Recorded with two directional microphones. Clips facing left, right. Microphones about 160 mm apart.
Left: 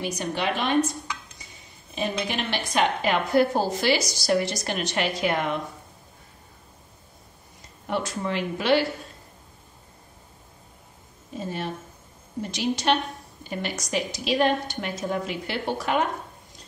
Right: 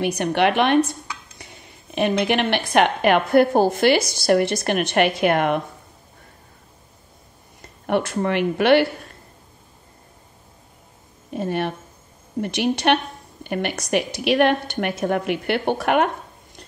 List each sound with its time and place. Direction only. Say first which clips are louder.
0.0 s a woman's voice: right 8 dB; 65° right (ahead or behind)
1.4 s music: right 6 dB; 65° right (ahead or behind)
2.0 s a woman's voice: right 8 dB; 65° right (ahead or behind)
7.8 s a woman's voice: right 7 dB; 60° right (ahead or behind)
11.2 s a woman's voice: right 7 dB; 65° right (ahead or behind)